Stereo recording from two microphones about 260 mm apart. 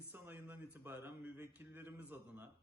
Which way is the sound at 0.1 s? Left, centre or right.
Centre.